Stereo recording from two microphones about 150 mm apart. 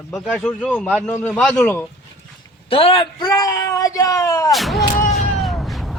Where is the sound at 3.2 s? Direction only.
25° left (ahead or behind).